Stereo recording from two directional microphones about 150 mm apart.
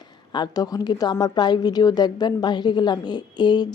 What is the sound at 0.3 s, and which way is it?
A woman's voice, 25° left (ahead or behind).